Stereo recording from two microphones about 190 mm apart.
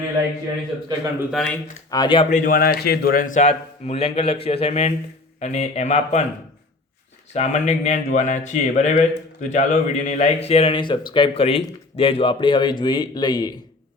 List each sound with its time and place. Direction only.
1.2 s speech: centre (ahead or behind)
1.9 s speech: 25° left (ahead or behind)
2.3 s speech: 45° left (ahead or behind)
7.3 s speech: 40° left (ahead or behind); by 13.6 s 20° left (ahead or behind)